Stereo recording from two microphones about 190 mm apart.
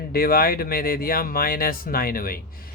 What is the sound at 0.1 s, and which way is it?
Speech, 50° left (ahead or behind).